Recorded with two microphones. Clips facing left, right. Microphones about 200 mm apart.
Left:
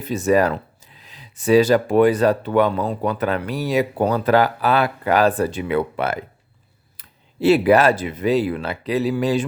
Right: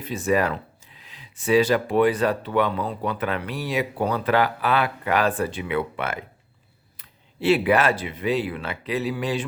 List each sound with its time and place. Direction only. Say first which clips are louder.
0.0 s speech: left 5 dB; 40° left (ahead or behind)